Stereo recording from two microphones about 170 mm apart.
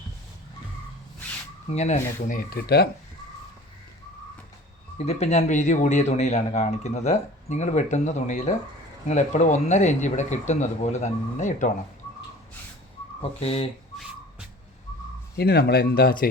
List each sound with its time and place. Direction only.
1.6 s speech: 40° left (ahead or behind)
2.5 s speech: 65° left (ahead or behind)
4.9 s a man's voice: 40° left (ahead or behind)
13.4 s speech: 35° left (ahead or behind)
15.4 s speech: 70° left (ahead or behind)